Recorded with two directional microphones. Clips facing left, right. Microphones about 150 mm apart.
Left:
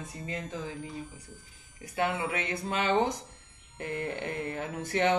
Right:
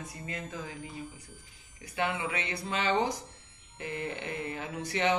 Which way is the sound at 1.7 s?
45° left (ahead or behind).